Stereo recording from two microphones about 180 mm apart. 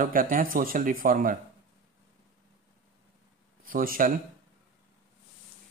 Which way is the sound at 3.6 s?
50° right (ahead or behind).